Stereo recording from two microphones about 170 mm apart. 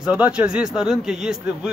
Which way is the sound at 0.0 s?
5° right (ahead or behind).